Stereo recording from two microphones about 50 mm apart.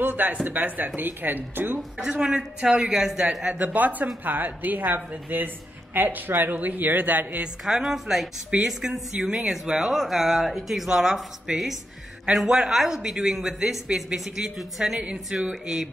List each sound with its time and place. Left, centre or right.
0.0 s speech: right
2.0 s speech: centre
3.5 s speech: right
7.6 s speech: centre
12.4 s speech: centre